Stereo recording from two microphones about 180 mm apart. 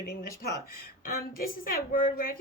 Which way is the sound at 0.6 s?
55° left (ahead or behind).